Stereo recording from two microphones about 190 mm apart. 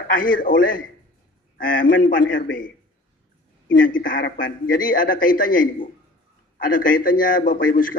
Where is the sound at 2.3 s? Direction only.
80° left.